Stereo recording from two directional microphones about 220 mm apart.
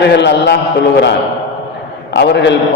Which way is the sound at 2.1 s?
50° left (ahead or behind).